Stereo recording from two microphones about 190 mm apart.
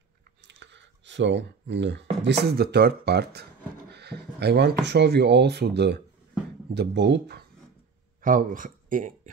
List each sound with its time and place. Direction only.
0.5 s a sound: 70° right (ahead or behind)
2.2 s speech: 55° right (ahead or behind)
8.2 s speech: 45° right (ahead or behind)